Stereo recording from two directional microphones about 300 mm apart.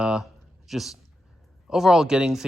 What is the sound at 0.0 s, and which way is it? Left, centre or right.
Speech, centre.